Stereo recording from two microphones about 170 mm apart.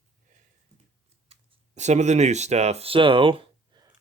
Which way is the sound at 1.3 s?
45° right (ahead or behind).